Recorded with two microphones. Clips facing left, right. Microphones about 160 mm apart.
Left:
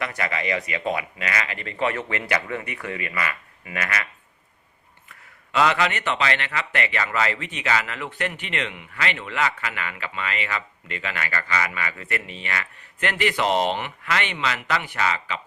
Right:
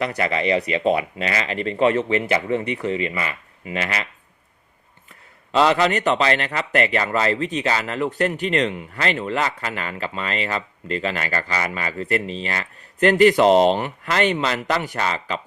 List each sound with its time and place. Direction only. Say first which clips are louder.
0.0 s speech: right 6 dB; 30° right (ahead or behind)
5.0 s speech: right 1 dB; 30° right (ahead or behind)